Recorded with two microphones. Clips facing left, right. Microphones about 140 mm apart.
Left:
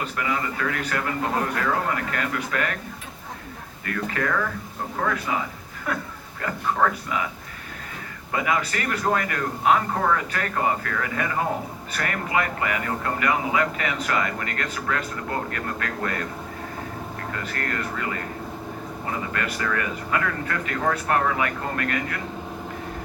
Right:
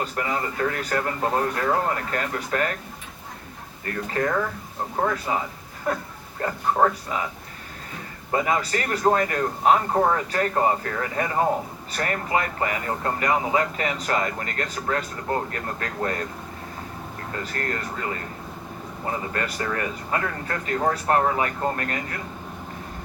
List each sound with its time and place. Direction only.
0.0 s speech: 35° right (ahead or behind)
3.8 s speech: 30° right (ahead or behind)
8.3 s speech: 35° right (ahead or behind)
17.3 s speech: 30° right (ahead or behind)
19.3 s speech: 35° right (ahead or behind)